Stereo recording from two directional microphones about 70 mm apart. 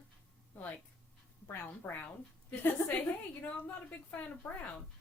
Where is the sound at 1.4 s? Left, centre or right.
Left.